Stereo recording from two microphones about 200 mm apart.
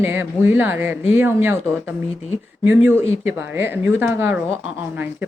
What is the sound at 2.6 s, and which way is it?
A woman's voice, 10° right (ahead or behind).